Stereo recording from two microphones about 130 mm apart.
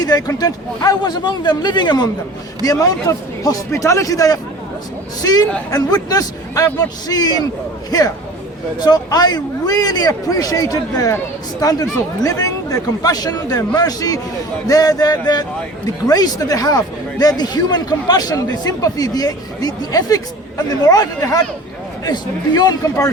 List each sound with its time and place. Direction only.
0.0 s a man's voice: 30° left (ahead or behind)
2.6 s a man's voice: 25° left (ahead or behind)